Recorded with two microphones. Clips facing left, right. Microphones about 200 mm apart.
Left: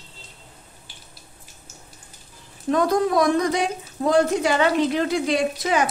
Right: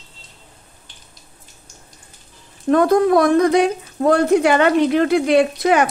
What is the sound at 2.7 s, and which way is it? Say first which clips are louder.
A woman's voice: right 6 dB; 55° right (ahead or behind).